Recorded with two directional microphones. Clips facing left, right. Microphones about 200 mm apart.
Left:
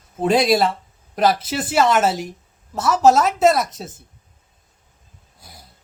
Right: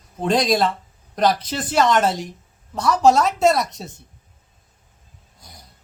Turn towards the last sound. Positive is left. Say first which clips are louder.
# left 1 dB
turn(degrees=5)  # may be behind; listen again after turning